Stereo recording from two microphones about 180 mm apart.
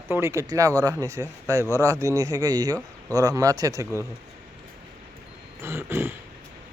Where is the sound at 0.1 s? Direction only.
15° right (ahead or behind).